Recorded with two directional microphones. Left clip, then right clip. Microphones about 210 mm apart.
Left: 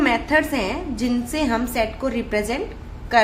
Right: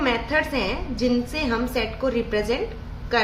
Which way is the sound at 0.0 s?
35° left (ahead or behind).